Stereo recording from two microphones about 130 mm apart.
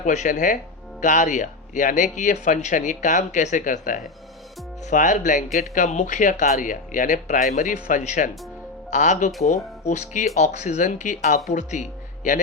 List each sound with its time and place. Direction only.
0.0 s speech: 70° left (ahead or behind); by 4.0 s 85° left
4.9 s speech: 70° left (ahead or behind)